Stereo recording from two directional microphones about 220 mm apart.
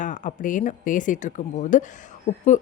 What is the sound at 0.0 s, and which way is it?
A woman's voice, 35° left (ahead or behind).